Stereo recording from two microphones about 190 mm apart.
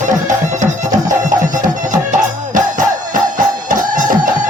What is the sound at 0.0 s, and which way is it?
Music, 40° right (ahead or behind).